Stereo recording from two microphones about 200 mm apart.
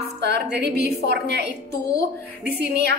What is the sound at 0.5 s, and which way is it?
Speech, 55° right (ahead or behind).